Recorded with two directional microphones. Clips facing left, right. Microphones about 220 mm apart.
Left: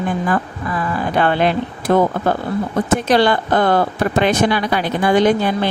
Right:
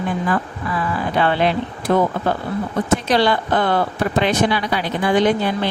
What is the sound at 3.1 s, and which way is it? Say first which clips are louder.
Speech: left 5 dB; 50° left (ahead or behind).